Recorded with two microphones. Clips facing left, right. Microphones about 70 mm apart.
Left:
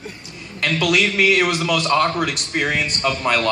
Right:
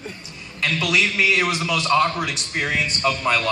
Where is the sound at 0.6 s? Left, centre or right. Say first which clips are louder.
Left 3 dB; left.